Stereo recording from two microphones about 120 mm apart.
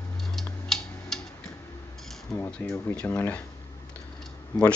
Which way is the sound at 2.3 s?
15° left (ahead or behind).